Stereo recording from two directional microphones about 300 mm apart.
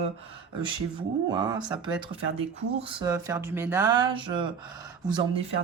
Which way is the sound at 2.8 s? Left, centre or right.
Centre.